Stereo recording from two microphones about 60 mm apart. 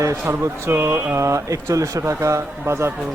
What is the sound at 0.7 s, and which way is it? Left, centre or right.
Speech, right.